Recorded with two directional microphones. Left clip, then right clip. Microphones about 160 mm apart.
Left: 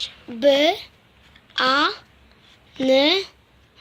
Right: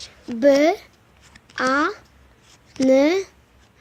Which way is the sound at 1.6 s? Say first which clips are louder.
Left 2 dB; 50° right (ahead or behind).